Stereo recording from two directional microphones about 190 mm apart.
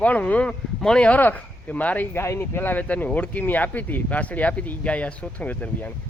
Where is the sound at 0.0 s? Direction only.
5° left (ahead or behind).